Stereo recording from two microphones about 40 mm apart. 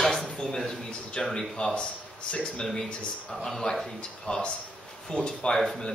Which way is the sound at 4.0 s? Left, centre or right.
Left.